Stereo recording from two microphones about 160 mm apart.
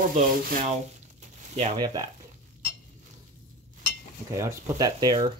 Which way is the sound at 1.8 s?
25° right (ahead or behind).